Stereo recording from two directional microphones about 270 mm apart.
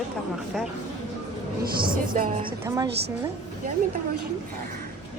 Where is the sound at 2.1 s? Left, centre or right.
Right.